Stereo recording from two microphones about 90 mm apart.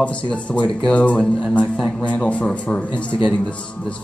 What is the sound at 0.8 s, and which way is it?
Speech, 15° left (ahead or behind).